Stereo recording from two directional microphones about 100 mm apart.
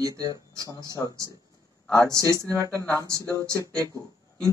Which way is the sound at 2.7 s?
15° left (ahead or behind).